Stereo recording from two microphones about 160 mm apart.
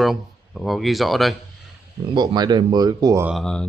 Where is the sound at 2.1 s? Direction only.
25° right (ahead or behind).